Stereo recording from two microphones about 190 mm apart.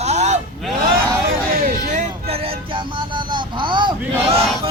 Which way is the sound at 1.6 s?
35° right (ahead or behind).